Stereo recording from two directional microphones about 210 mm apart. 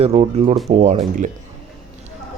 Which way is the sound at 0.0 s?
30° right (ahead or behind).